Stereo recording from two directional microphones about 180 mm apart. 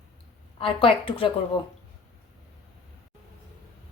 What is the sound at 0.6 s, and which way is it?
Speech, 30° left (ahead or behind).